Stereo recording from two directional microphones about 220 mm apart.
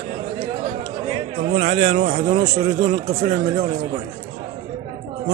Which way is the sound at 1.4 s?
30° right (ahead or behind).